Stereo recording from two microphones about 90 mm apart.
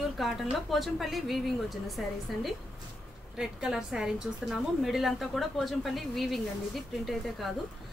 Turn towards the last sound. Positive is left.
turn(degrees=0)  # may be behind; listen again after turning